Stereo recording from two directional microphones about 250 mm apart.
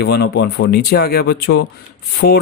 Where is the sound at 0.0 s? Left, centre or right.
Left.